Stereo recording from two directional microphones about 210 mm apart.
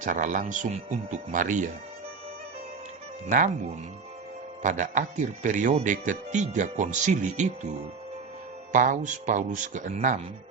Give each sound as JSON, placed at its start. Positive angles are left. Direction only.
{"t": 0.0, "sound": "speech", "side_deg": -35}
{"t": 3.2, "sound": "speech", "side_deg": -40}
{"t": 4.6, "sound": "speech", "side_deg": -35}